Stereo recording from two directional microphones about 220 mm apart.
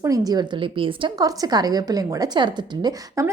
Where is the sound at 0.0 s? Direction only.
15° right (ahead or behind).